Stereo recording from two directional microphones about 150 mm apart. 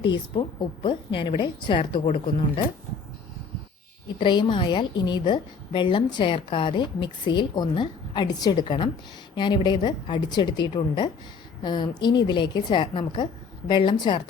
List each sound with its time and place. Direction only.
0.0 s a woman's voice: 30° left (ahead or behind)
4.2 s a woman's voice: 30° left (ahead or behind)